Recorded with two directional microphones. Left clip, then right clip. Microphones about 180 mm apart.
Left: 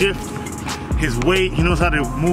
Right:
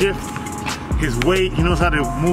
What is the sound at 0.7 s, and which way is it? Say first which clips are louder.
Music: left 1 dB; centre (ahead or behind).